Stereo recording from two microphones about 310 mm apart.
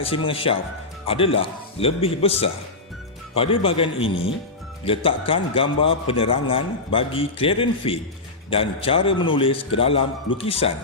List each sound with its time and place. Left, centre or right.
0.0 s a man's voice: centre